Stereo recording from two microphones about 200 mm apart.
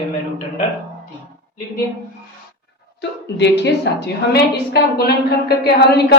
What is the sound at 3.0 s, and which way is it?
A woman's voice, 60° left (ahead or behind).